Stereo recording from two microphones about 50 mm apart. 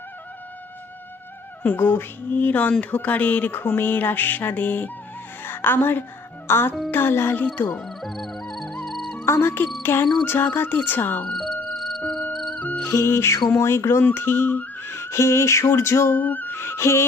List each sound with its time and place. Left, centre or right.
1.7 s speech: left
2.2 s music: left
5.4 s a woman's voice: left
7.5 s music: left
7.9 s music: centre
9.2 s music: left
9.8 s speech: left
11.3 s music: centre
12.5 s music: left
12.8 s music: left
14.1 s a sound: left
14.8 s whistling: left
16.1 s music: left
16.6 s music: left